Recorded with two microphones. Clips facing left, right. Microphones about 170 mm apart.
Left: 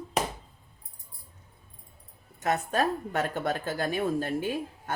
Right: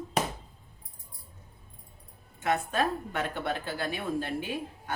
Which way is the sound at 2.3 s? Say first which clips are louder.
Left 1 dB; 40° left (ahead or behind).